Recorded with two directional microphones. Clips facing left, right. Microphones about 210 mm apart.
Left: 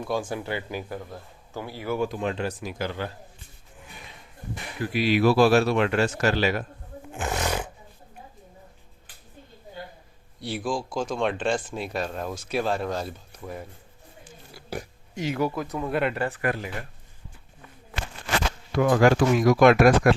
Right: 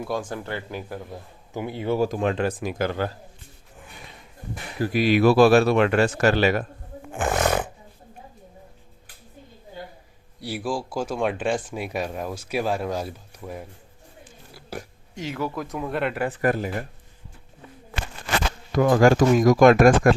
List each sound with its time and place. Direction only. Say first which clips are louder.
0.0 s speech: even; centre (ahead or behind)
1.1 s a man's voice: right 3 dB; 20° right (ahead or behind)
2.0 s speech: right 3 dB; 45° right (ahead or behind)
2.2 s speech: right 5 dB; 55° right (ahead or behind)
4.8 s speech: right 3 dB; 45° right (ahead or behind)
7.1 s roar: right 5 dB; 50° right (ahead or behind)
10.4 s speech: right 1 dB; 5° right (ahead or behind)
14.5 s pig: left 1 dB; 5° right (ahead or behind)
15.1 s speech: left 3 dB; 15° left (ahead or behind)
15.5 s speech: left 1 dB; centre (ahead or behind)
16.4 s speech: right 5 dB; 40° right (ahead or behind)
18.7 s speech: right 2 dB; 40° right (ahead or behind)